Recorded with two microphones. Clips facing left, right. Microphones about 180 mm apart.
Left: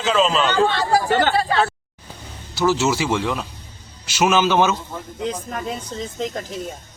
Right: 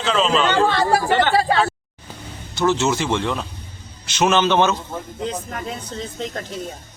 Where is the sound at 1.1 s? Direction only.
40° left (ahead or behind).